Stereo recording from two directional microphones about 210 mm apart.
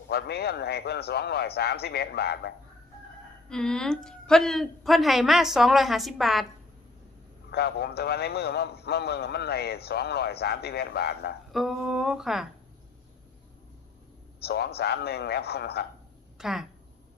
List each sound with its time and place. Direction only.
0.1 s a man's voice: 50° left (ahead or behind)
3.5 s a woman's voice: 5° left (ahead or behind)
7.5 s a man's voice: 50° left (ahead or behind)
11.5 s a woman's voice: centre (ahead or behind)
14.4 s a man's voice: 50° left (ahead or behind)
16.4 s a woman's voice: centre (ahead or behind)